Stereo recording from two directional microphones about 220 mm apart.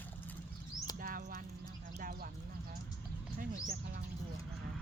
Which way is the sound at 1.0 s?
40° right (ahead or behind).